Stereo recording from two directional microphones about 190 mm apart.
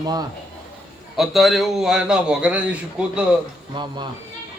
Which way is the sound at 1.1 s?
Centre (ahead or behind).